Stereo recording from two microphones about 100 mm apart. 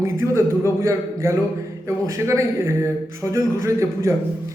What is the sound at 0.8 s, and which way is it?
A man's voice, 25° right (ahead or behind).